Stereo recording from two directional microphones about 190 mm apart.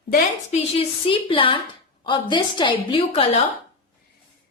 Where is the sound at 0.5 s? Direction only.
30° left (ahead or behind).